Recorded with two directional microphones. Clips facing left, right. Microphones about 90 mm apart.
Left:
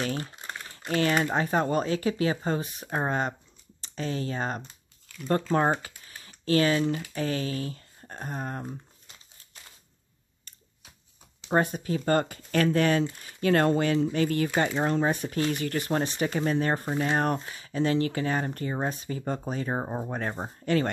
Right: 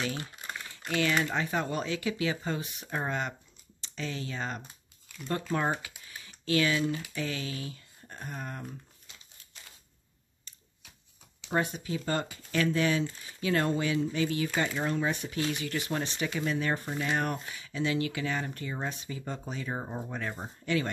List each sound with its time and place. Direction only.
0.0 s speech: 40° left (ahead or behind)
0.7 s crumpling: 35° left (ahead or behind)
1.1 s speech: 35° left (ahead or behind)
4.6 s typing: 10° right (ahead or behind)
5.8 s typing: 40° left (ahead or behind)
7.2 s speech: 40° left (ahead or behind)
11.4 s speech: 40° left (ahead or behind)